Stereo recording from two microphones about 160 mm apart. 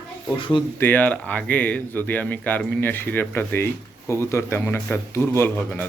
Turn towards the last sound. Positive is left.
turn(degrees=10)  # may be behind; listen again after turning